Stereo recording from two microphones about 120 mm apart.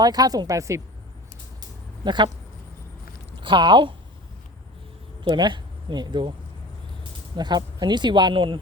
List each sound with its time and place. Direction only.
0.0 s speech: 35° right (ahead or behind)
2.0 s speech: 40° right (ahead or behind)
3.4 s speech: 40° right (ahead or behind)
5.2 s speech: 40° right (ahead or behind)
7.3 s speech: 35° right (ahead or behind)